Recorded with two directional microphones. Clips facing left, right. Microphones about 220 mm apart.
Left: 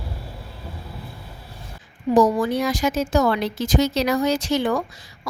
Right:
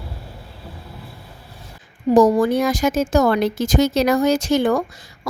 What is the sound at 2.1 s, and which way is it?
Speech, 45° right (ahead or behind).